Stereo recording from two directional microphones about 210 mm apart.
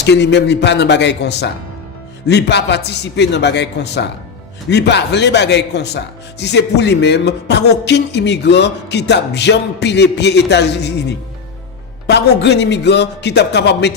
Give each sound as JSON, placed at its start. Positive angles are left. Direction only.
{"t": 0.0, "sound": "speech", "side_deg": 55}
{"t": 12.0, "sound": "speech", "side_deg": 55}